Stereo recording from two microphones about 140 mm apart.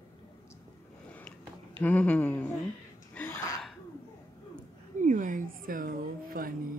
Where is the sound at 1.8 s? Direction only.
10° left (ahead or behind).